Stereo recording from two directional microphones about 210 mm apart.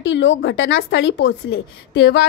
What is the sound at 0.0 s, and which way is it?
A woman's voice, 60° left (ahead or behind).